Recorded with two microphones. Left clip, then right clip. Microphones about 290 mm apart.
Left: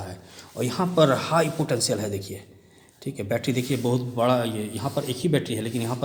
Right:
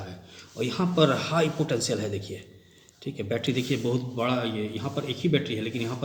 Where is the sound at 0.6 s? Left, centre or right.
Left.